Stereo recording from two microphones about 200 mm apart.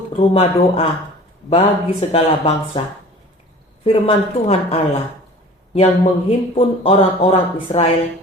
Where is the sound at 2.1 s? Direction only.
30° left (ahead or behind).